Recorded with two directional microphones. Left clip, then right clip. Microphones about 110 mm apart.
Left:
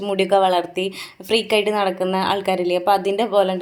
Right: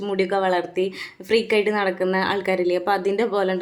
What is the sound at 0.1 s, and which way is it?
A woman's voice, 25° left (ahead or behind).